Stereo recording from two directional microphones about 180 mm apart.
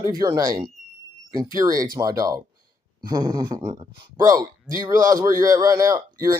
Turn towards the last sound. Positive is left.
turn(degrees=-20)  # may be behind; listen again after turning